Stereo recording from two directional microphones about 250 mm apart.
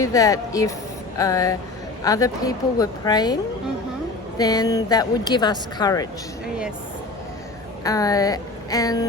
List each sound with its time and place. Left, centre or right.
0.0 s speech: centre
4.4 s speech: centre
7.9 s speech: centre